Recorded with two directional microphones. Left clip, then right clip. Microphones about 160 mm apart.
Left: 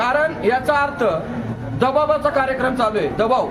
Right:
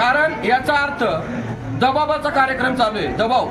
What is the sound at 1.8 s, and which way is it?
A man's voice, 5° left (ahead or behind).